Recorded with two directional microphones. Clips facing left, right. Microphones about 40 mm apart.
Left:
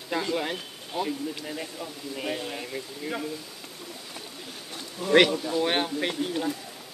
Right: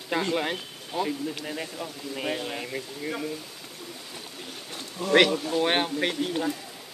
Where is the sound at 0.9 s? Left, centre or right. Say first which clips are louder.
Right 1 dB; centre.